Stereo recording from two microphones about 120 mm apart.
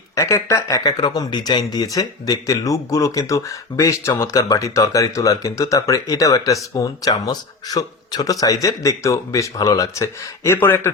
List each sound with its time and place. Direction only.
0.2 s speech: 25° left (ahead or behind)